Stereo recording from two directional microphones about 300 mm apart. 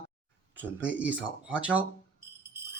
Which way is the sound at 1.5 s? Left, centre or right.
Centre.